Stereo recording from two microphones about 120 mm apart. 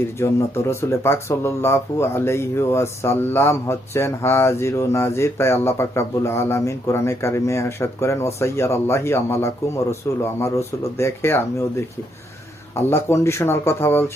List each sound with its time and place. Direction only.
0.2 s speech: 20° left (ahead or behind)
12.9 s speech: 20° left (ahead or behind)